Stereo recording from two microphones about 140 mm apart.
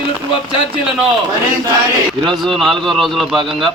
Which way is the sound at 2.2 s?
Centre (ahead or behind).